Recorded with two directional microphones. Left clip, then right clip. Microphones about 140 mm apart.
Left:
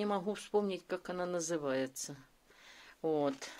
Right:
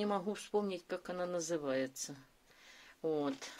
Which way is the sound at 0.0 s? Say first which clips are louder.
Left 1 dB; 15° left (ahead or behind).